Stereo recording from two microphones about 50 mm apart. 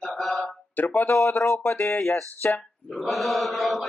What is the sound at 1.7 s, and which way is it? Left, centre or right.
Speech, left.